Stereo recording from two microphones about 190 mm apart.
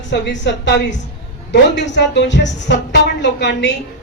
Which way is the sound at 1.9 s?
65° left (ahead or behind).